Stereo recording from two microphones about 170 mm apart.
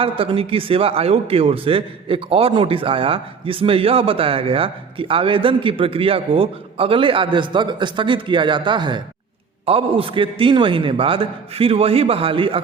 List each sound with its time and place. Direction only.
0.0 s a man's voice: 30° right (ahead or behind)